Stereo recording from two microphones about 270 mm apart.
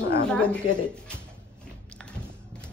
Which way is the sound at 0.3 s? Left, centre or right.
Centre.